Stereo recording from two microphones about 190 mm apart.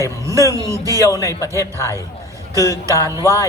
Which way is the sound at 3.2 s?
15° left (ahead or behind).